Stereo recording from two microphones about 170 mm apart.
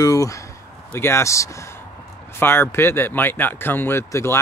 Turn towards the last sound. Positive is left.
turn(degrees=15)  # may be behind; listen again after turning